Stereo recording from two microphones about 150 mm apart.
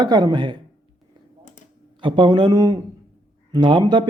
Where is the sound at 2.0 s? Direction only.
30° right (ahead or behind).